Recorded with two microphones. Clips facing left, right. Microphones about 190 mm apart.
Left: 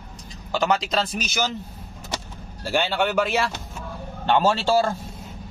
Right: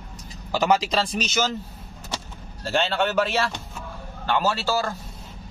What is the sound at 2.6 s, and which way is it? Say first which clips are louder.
Speech: even; 10° left (ahead or behind).